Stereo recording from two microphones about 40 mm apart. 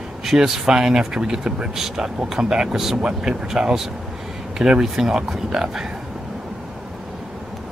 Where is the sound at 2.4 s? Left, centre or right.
Centre.